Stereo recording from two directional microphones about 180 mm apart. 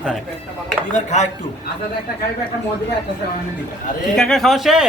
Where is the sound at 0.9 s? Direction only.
40° left (ahead or behind).